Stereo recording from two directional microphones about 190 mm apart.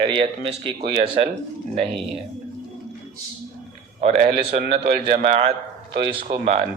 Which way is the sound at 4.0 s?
35° right (ahead or behind).